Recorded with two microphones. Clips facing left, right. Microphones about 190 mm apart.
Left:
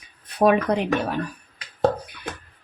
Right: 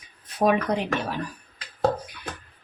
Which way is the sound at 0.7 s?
60° left (ahead or behind).